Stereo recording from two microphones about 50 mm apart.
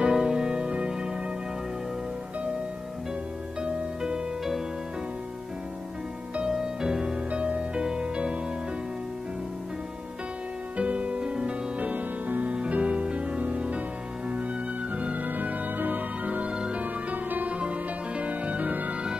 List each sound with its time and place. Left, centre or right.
0.0 s music: centre
3.6 s music: centre
6.3 s music: centre
7.2 s music: right
10.8 s music: right
11.9 s music: right
15.0 s music: right
16.8 s music: right